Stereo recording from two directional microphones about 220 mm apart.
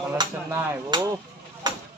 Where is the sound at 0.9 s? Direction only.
20° right (ahead or behind).